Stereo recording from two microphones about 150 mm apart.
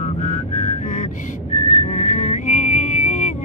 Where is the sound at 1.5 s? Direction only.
50° left (ahead or behind).